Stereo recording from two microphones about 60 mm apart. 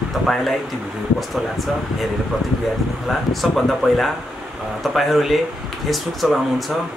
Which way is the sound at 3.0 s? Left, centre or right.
Centre.